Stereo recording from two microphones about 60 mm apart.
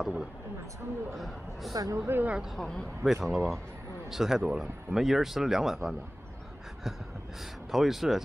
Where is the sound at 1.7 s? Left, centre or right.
Right.